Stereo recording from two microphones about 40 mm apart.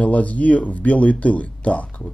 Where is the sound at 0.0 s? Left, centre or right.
Left.